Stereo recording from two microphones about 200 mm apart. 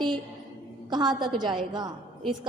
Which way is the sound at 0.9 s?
20° right (ahead or behind).